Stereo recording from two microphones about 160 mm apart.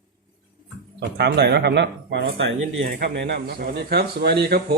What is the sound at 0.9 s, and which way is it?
Speech, 90° right.